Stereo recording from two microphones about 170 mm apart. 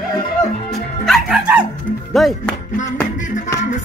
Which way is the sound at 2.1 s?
Centre (ahead or behind).